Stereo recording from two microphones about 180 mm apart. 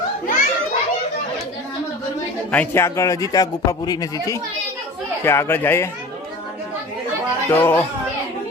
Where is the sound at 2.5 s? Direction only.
10° left (ahead or behind).